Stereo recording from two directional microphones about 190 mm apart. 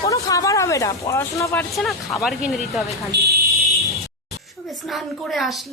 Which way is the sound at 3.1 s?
60° right (ahead or behind).